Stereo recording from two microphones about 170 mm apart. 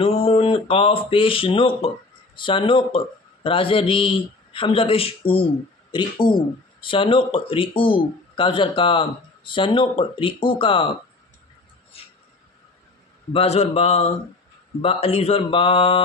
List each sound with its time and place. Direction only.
0.0 s a man's voice: 35° left (ahead or behind)
11.9 s a sound: 35° left (ahead or behind)
13.3 s a man's voice: 35° left (ahead or behind)